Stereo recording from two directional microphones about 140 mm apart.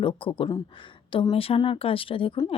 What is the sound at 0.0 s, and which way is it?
Speech, 35° left (ahead or behind).